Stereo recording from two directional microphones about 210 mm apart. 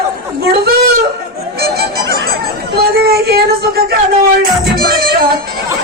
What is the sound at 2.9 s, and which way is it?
A man's voice, 50° right (ahead or behind).